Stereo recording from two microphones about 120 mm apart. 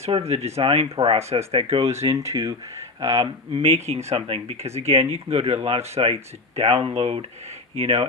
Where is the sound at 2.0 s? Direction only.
25° right (ahead or behind).